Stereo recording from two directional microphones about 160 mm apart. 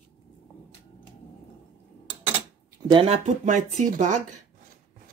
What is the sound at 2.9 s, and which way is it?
Speech, 40° right (ahead or behind).